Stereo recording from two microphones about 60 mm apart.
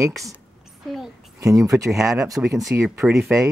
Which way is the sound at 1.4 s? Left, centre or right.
Right.